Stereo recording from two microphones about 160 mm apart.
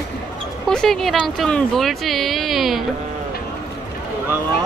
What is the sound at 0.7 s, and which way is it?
Speech, centre (ahead or behind).